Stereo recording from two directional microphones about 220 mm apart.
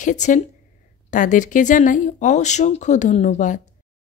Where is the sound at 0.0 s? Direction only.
35° left (ahead or behind).